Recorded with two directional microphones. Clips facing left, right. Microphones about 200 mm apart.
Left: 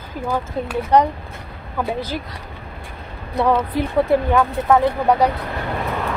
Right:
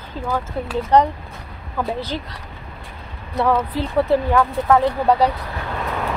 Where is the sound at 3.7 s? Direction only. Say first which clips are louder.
Left 1 dB; 15° left (ahead or behind).